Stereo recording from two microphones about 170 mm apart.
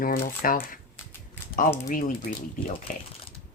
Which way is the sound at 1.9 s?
55° left (ahead or behind).